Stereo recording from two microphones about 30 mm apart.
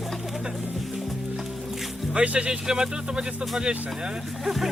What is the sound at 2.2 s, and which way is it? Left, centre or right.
Speech, right.